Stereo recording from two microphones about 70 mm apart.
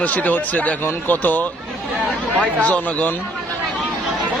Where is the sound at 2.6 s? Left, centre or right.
Centre.